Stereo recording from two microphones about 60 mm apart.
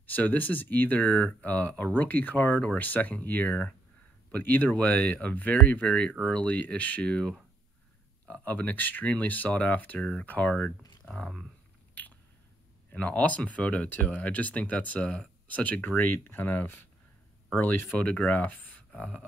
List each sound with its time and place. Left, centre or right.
0.0 s speech: left
9.9 s speech: centre
10.2 s speech: left
11.1 s speech: centre
13.0 s speech: left
17.9 s speech: left